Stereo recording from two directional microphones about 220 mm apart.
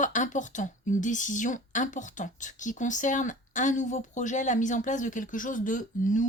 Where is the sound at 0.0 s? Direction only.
35° left (ahead or behind).